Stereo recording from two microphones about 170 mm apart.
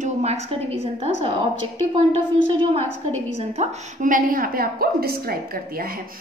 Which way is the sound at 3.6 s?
50° right (ahead or behind).